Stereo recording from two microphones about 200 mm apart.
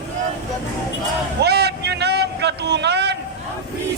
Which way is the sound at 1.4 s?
55° right (ahead or behind).